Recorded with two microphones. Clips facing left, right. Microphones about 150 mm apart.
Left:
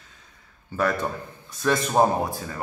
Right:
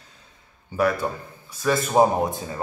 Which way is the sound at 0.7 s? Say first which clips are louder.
Right 3 dB; 15° right (ahead or behind).